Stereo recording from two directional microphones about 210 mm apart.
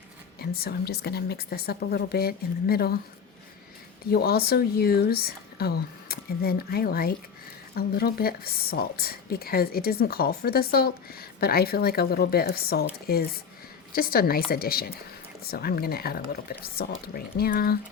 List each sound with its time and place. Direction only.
0.3 s a woman's voice: 45° left (ahead or behind)
4.0 s a woman's voice: 45° left (ahead or behind)